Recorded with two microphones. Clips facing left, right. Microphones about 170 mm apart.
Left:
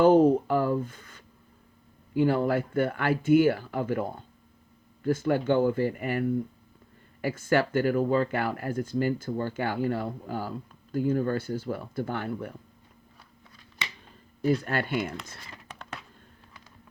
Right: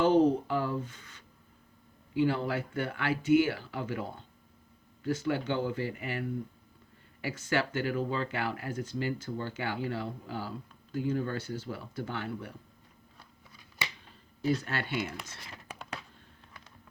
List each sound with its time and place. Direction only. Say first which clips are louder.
0.0 s speech: left 5 dB; 50° left (ahead or behind)
14.4 s speech: left 5 dB; 50° left (ahead or behind)
15.6 s computer keyboard: even; 5° right (ahead or behind)